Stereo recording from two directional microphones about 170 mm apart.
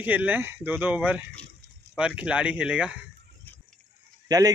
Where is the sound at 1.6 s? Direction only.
80° right.